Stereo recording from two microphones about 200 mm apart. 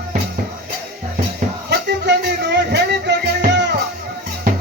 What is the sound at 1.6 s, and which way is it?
Music, 55° right (ahead or behind).